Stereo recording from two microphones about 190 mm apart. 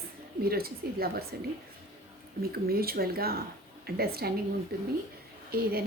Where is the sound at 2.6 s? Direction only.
50° right (ahead or behind).